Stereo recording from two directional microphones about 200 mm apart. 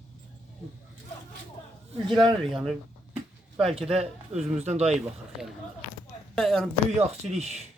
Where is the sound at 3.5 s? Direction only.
30° right (ahead or behind).